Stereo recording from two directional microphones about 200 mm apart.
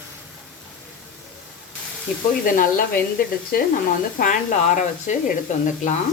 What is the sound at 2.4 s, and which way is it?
A woman's voice, 45° left (ahead or behind).